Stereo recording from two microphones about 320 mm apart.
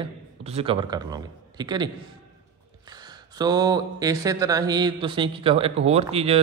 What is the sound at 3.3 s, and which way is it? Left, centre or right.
A man's voice, centre.